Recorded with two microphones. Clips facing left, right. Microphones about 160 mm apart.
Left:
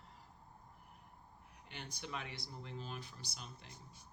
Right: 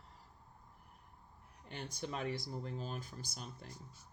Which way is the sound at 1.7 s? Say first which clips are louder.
Right 5 dB; 40° right (ahead or behind).